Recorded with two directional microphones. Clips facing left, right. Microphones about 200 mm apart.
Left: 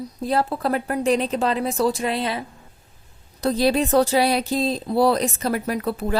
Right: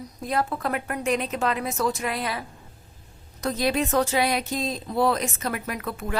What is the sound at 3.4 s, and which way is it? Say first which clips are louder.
Speech: left 5 dB; 35° left (ahead or behind).